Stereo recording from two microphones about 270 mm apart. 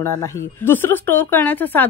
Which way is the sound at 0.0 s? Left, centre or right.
Centre.